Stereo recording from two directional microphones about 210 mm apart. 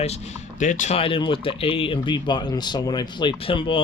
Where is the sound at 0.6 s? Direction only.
35° left (ahead or behind).